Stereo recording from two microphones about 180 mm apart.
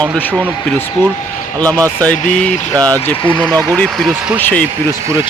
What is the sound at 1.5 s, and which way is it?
Speech, 5° left (ahead or behind).